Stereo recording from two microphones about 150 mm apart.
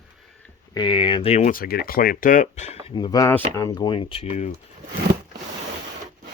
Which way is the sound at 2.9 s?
30° left (ahead or behind).